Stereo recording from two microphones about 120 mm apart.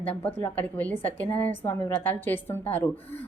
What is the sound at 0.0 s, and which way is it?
Speech, 15° left (ahead or behind).